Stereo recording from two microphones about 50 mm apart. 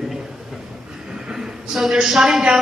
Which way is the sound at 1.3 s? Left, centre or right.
Centre.